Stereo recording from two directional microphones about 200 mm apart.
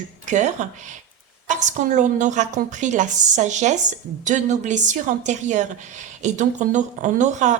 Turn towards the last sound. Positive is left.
turn(degrees=-35)  # may be behind; listen again after turning